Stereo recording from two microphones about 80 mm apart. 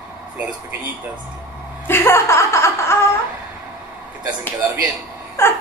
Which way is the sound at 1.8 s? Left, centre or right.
Left.